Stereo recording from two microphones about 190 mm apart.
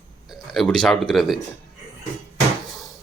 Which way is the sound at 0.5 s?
5° left (ahead or behind).